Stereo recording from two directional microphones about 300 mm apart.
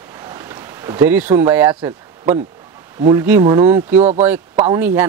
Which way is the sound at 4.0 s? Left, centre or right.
Right.